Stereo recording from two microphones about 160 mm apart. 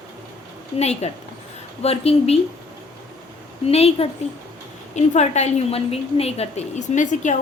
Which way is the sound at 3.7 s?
40° left (ahead or behind).